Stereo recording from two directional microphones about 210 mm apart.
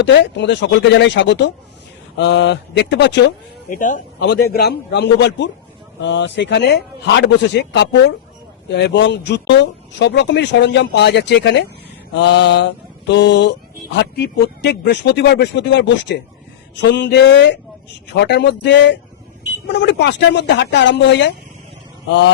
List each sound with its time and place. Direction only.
0.0 s speech: 55° left (ahead or behind)
3.7 s speech: 40° left (ahead or behind)
4.5 s speech: 50° left (ahead or behind)